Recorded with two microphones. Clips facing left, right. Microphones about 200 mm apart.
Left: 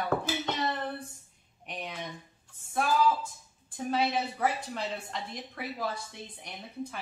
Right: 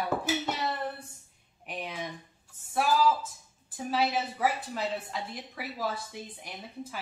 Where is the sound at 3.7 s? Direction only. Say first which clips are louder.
Even; 5° right (ahead or behind).